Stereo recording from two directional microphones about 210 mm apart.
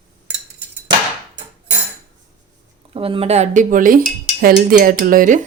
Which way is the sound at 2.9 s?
25° right (ahead or behind).